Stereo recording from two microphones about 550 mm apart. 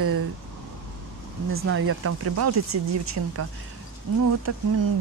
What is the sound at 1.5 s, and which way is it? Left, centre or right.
Speech, right.